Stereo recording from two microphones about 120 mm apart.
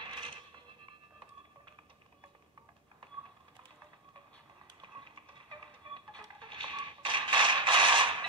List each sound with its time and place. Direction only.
0.0 s music: 40° right (ahead or behind)
4.8 s typing: 40° right (ahead or behind)
6.1 s a sound: 40° right (ahead or behind)